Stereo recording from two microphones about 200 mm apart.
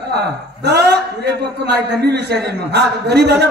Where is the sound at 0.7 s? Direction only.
55° right (ahead or behind).